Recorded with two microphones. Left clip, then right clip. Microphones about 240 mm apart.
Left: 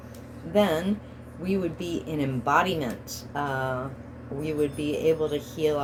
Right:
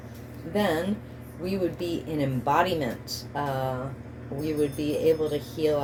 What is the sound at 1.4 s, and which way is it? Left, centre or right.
Speech, left.